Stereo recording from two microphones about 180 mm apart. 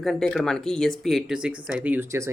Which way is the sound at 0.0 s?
Centre (ahead or behind).